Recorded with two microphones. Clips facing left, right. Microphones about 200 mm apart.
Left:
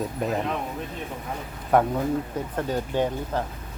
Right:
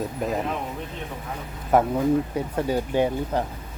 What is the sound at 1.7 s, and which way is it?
Speech, 5° right (ahead or behind).